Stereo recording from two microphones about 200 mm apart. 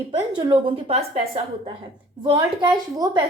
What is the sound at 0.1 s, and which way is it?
A woman's voice, 25° right (ahead or behind).